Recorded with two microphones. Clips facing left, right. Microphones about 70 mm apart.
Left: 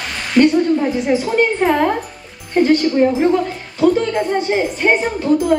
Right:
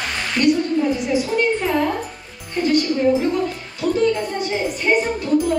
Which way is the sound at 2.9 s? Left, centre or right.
Left.